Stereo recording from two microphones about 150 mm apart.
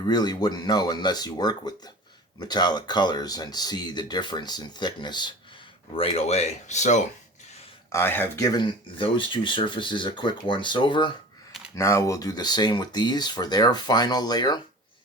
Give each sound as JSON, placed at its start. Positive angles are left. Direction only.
{"t": 0.0, "sound": "speech", "side_deg": 30}
{"t": 5.9, "sound": "speech", "side_deg": 40}
{"t": 7.9, "sound": "speech", "side_deg": 15}
{"t": 11.7, "sound": "speech", "side_deg": 20}